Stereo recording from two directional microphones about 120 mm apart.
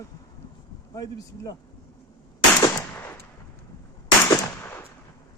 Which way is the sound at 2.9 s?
20° left (ahead or behind).